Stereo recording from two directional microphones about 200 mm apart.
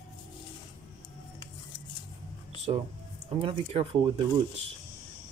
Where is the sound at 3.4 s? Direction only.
25° right (ahead or behind).